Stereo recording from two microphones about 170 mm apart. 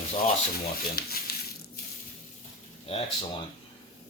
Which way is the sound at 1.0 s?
60° left (ahead or behind).